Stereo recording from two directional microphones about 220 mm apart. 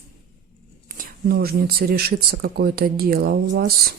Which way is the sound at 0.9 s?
40° right (ahead or behind).